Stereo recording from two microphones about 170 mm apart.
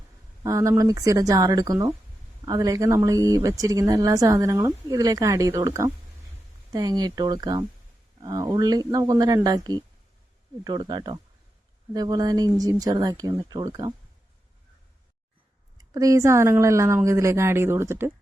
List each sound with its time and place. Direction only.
0.4 s speech: 15° right (ahead or behind)
15.8 s speech: 20° right (ahead or behind)